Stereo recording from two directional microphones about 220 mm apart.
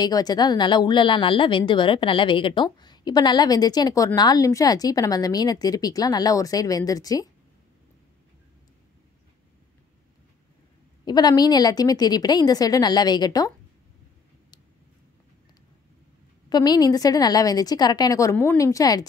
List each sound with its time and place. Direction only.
0.0 s a woman's voice: 20° left (ahead or behind)
11.1 s a woman's voice: 20° left (ahead or behind)
16.4 s a woman's voice: 20° left (ahead or behind)